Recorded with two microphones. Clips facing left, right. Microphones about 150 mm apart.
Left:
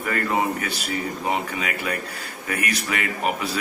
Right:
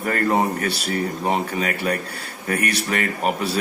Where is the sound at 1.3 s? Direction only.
40° right (ahead or behind).